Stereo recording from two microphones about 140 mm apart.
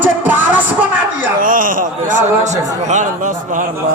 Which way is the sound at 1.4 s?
75° right (ahead or behind).